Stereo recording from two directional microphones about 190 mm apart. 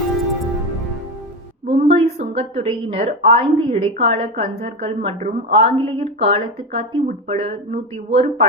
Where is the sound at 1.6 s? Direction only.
30° right (ahead or behind).